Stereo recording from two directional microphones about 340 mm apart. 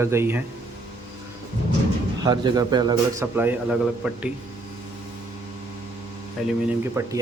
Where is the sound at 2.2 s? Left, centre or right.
Centre.